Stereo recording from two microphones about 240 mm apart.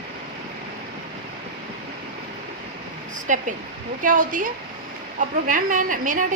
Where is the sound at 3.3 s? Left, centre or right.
Right.